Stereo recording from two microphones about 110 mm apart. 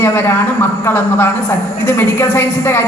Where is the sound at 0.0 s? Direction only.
20° left (ahead or behind).